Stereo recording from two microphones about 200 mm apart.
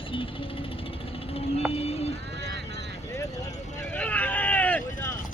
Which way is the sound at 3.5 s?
35° left (ahead or behind).